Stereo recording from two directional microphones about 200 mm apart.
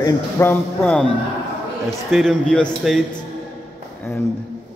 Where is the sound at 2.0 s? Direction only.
Centre (ahead or behind).